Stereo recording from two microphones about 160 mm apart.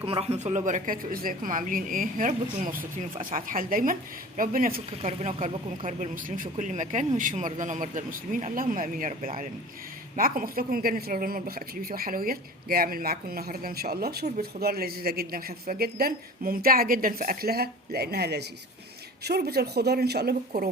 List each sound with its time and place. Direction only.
0.0 s a woman's voice: 35° right (ahead or behind); by 4.8 s 60° right (ahead or behind)
4.9 s speech: 40° right (ahead or behind)
5.8 s a woman's voice: 55° right (ahead or behind); by 20.3 s 85° right
20.5 s speech: 75° right (ahead or behind)